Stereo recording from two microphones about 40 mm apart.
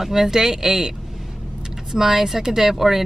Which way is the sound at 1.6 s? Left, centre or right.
Centre.